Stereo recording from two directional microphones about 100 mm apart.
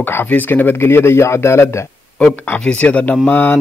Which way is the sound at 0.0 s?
20° left (ahead or behind).